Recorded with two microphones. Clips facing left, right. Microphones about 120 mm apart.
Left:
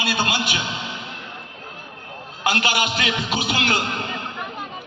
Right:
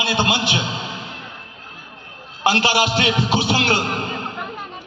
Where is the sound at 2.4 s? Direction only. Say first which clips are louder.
Right 4 dB; 30° right (ahead or behind).